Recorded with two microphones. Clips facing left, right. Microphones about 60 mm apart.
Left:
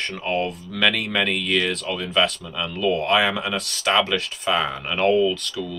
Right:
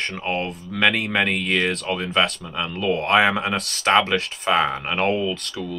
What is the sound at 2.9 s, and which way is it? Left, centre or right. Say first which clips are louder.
Speech: right 3 dB; right.